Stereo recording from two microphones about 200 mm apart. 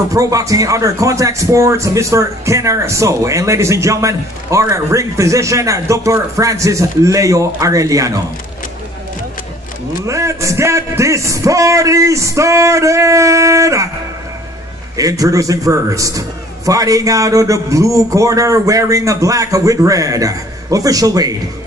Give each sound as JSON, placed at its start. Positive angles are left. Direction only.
{"t": 0.1, "sound": "speech", "side_deg": -15}
{"t": 10.0, "sound": "speech", "side_deg": -15}
{"t": 15.0, "sound": "speech", "side_deg": -15}